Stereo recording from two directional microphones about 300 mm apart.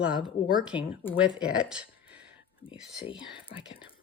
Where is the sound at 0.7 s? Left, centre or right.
Centre.